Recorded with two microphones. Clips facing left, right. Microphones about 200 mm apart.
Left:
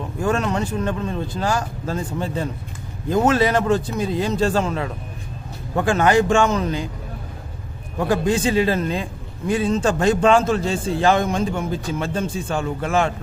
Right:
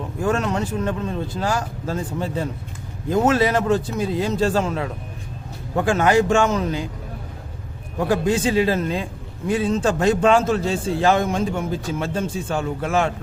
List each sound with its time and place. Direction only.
0.2 s a man's voice: 5° right (ahead or behind)
7.9 s a man's voice: 5° right (ahead or behind)